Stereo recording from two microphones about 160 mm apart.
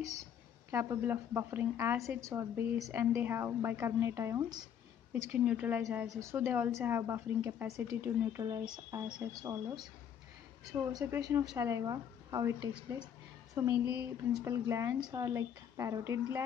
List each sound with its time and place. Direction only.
0.7 s a woman's voice: 15° right (ahead or behind)
5.3 s a woman's voice: 10° right (ahead or behind)
13.6 s a woman's voice: 10° right (ahead or behind)